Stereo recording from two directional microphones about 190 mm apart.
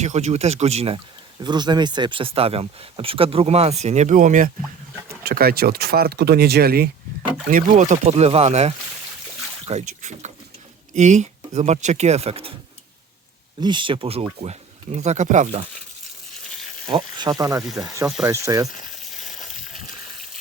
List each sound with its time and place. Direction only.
0.0 s speech: 35° right (ahead or behind)
1.5 s speech: 20° right (ahead or behind); by 6.9 s 55° right (ahead or behind)
7.5 s speech: 40° right (ahead or behind)
13.6 s speech: 25° right (ahead or behind); by 15.6 s 40° right (ahead or behind)
17.2 s speech: 20° right (ahead or behind)
17.6 s speech: centre (ahead or behind)
17.8 s speech: 15° right (ahead or behind)